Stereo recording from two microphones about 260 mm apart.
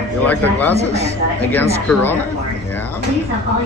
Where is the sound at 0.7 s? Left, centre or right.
Right.